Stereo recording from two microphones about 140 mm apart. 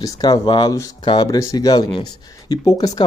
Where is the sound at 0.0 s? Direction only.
30° left (ahead or behind).